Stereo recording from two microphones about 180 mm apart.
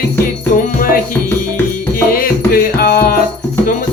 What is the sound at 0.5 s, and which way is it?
Music, 50° left (ahead or behind).